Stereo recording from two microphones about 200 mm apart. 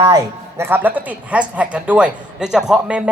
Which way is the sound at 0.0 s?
15° right (ahead or behind).